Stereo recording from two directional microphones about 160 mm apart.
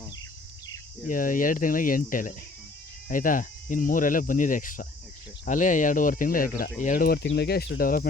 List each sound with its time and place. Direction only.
1.0 s speech: 55° left (ahead or behind)